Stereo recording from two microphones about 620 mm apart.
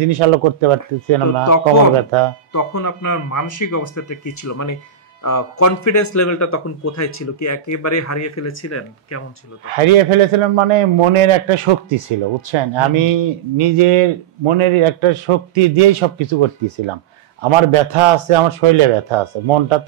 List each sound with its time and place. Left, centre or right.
0.0 s a man's voice: right
2.5 s speech: left
9.8 s a man's voice: right